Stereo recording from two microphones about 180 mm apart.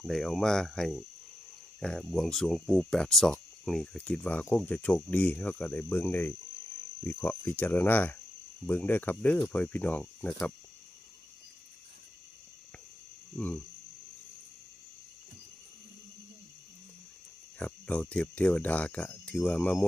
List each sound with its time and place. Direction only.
0.0 s speech: centre (ahead or behind)
13.3 s speech: 10° left (ahead or behind)
17.6 s speech: 10° left (ahead or behind)